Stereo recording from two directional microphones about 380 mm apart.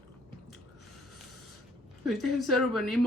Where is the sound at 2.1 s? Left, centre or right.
Centre.